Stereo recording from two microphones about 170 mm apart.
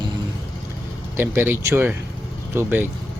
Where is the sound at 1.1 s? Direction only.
10° right (ahead or behind).